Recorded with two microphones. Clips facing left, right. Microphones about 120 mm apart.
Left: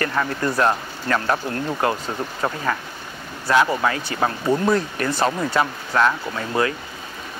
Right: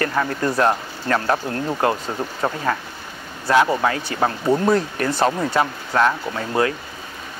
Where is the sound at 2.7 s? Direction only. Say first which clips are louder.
Right 2 dB; 35° right (ahead or behind).